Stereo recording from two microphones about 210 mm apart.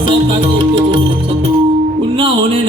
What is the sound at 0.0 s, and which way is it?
Music, 25° right (ahead or behind).